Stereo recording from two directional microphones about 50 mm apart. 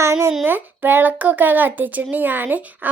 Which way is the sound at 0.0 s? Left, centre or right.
Right.